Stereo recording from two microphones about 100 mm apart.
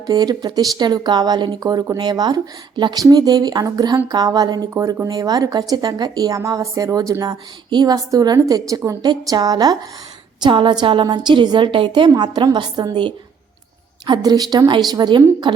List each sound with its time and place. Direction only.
0.1 s a woman's voice: 45° right (ahead or behind)
4.7 s speech: 30° right (ahead or behind)
10.4 s a woman's voice: 55° right (ahead or behind)